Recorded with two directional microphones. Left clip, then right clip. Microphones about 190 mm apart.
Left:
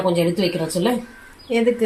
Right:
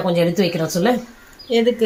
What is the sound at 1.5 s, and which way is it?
Speech, 10° left (ahead or behind).